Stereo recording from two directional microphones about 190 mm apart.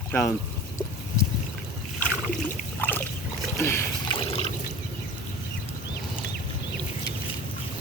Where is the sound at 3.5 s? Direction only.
15° left (ahead or behind).